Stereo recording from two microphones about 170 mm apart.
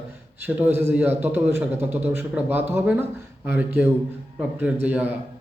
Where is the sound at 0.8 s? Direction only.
10° right (ahead or behind).